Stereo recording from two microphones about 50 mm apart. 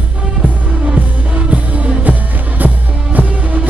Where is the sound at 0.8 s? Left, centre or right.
Right.